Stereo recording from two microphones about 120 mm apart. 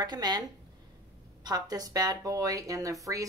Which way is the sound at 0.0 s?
35° right (ahead or behind).